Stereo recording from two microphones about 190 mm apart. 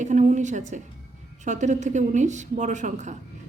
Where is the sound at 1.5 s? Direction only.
40° right (ahead or behind).